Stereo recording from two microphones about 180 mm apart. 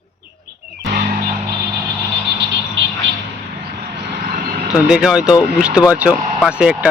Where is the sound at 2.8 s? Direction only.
90° right.